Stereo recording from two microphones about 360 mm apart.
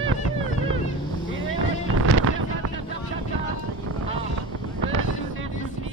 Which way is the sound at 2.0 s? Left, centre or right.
Right.